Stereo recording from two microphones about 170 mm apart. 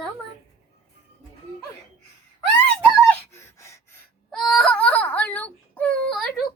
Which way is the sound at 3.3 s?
15° left (ahead or behind).